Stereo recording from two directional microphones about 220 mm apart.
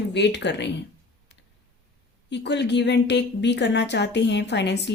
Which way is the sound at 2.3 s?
50° left (ahead or behind).